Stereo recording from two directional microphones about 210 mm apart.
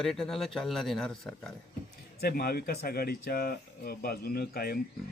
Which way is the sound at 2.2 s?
50° left (ahead or behind).